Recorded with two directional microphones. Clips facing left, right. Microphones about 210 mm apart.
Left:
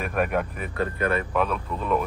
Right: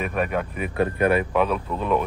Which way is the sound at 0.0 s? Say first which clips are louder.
Even; centre (ahead or behind).